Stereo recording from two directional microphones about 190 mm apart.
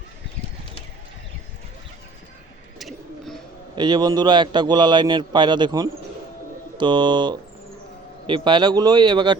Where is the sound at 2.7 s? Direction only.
Centre (ahead or behind).